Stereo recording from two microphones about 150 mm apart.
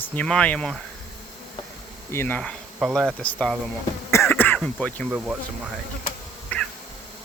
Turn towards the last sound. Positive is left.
turn(degrees=10)  # may be behind; listen again after turning